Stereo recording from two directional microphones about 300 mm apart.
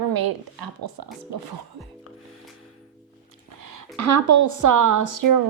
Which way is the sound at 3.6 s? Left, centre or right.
Right.